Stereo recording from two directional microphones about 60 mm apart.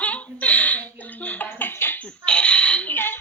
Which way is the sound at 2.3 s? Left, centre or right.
Centre.